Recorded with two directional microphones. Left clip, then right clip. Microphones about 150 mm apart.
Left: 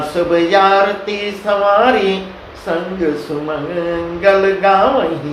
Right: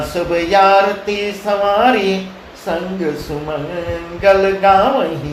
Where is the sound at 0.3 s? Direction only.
35° right (ahead or behind).